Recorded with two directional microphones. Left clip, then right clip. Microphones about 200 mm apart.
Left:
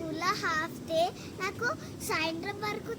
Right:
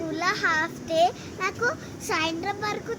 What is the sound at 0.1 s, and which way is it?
A child's voice, 25° left (ahead or behind).